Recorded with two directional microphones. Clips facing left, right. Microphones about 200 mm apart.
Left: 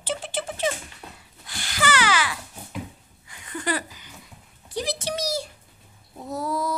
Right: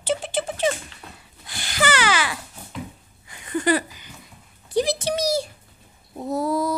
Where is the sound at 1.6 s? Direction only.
25° right (ahead or behind).